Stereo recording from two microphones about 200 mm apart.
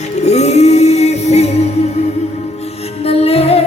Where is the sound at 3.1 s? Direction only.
30° left (ahead or behind).